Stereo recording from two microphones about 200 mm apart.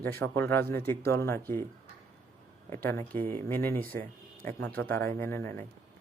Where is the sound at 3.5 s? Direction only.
10° left (ahead or behind).